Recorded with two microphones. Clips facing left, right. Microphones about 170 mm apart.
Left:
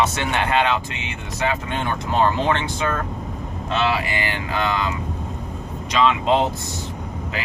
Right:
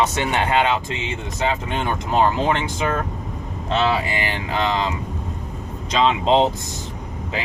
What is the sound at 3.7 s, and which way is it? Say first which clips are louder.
Speech: right 2 dB; 25° right (ahead or behind).